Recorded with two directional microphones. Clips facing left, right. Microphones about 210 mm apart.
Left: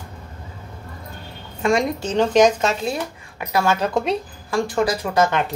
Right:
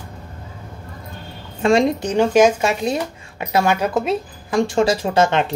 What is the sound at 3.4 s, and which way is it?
Speech, 20° right (ahead or behind).